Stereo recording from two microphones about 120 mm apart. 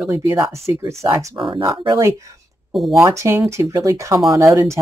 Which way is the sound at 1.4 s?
40° right (ahead or behind).